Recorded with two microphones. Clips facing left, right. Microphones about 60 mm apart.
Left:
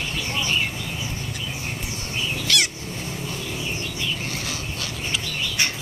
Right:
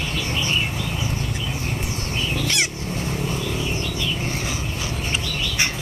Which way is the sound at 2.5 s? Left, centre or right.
Right.